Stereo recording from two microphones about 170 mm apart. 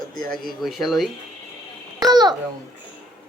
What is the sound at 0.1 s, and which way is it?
Speech, 55° right (ahead or behind).